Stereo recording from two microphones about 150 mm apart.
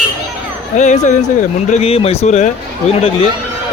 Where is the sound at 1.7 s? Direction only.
40° left (ahead or behind).